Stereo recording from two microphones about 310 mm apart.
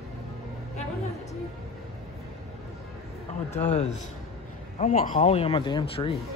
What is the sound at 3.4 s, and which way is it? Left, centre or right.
Speech, left.